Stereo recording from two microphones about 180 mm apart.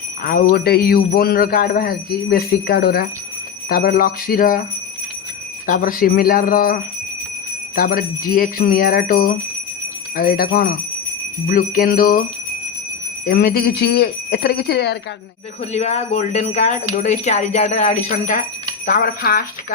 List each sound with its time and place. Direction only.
0.2 s speech: 55° left (ahead or behind)
5.6 s speech: 50° left (ahead or behind)
13.2 s speech: 60° left (ahead or behind)
15.7 s speech: 40° left (ahead or behind); by 19.5 s 55° left (ahead or behind)